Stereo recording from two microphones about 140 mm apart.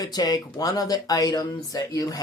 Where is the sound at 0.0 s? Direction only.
30° left (ahead or behind).